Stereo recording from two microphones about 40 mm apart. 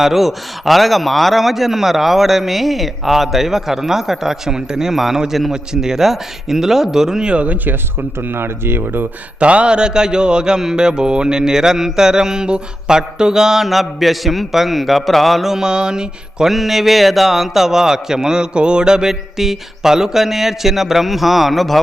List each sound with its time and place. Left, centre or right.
0.0 s a man's voice: centre
7.3 s speech: right
8.2 s speech: right
9.4 s speech: right; by 15.4 s centre
15.4 s mantra: centre
16.5 s speech: centre